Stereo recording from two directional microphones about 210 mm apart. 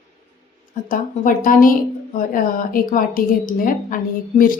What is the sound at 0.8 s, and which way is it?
A woman's voice, 40° left (ahead or behind).